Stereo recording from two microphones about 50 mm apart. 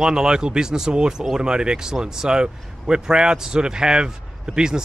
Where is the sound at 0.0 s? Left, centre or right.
Centre.